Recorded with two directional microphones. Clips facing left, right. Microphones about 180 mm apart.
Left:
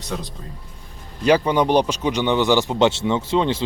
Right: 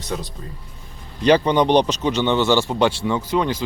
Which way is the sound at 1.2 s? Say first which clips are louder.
Right 1 dB; 5° left (ahead or behind).